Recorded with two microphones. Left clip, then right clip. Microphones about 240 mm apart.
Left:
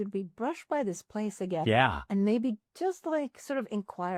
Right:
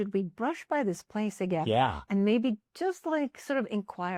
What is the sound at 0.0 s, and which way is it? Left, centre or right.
Speech, right.